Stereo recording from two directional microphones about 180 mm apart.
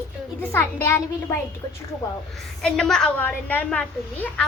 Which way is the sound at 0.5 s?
15° left (ahead or behind).